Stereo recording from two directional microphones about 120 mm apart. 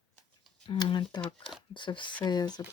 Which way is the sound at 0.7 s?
40° left (ahead or behind).